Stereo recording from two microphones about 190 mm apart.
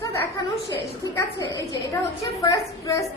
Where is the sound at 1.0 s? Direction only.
15° left (ahead or behind).